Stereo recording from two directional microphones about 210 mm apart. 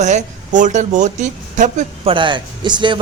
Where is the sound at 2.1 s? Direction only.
20° right (ahead or behind).